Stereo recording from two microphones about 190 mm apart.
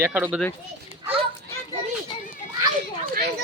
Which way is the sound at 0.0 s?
10° right (ahead or behind).